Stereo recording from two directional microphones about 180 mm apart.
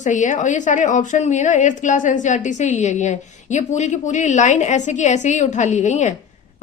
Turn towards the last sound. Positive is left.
turn(degrees=40)  # may be behind; listen again after turning